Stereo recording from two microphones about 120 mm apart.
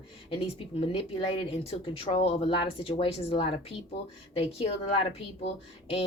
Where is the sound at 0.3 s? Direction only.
50° left (ahead or behind).